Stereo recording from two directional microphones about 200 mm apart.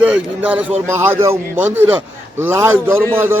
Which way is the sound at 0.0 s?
5° right (ahead or behind).